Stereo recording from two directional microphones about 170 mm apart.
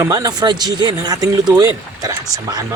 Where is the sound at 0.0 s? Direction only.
20° right (ahead or behind).